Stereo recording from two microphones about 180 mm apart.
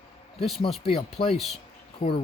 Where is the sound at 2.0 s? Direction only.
30° left (ahead or behind).